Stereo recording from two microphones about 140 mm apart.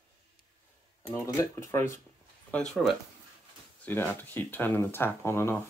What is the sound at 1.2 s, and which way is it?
Speech, 20° left (ahead or behind).